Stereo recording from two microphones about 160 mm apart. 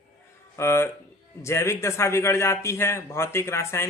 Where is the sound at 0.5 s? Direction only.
15° left (ahead or behind).